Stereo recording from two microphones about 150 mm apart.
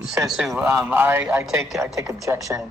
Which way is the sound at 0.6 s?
15° right (ahead or behind).